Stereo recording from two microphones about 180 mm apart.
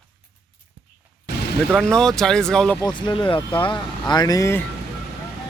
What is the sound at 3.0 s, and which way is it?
Speech, 25° left (ahead or behind).